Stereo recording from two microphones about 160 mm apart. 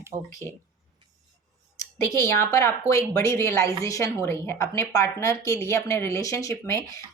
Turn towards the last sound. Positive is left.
turn(degrees=20)  # may be behind; listen again after turning